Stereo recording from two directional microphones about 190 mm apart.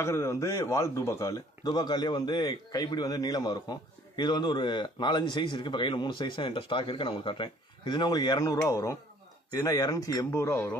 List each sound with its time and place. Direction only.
0.0 s speech: 15° left (ahead or behind)